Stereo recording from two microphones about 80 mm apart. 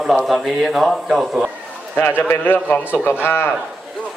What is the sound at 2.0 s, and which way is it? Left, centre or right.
Speech, left.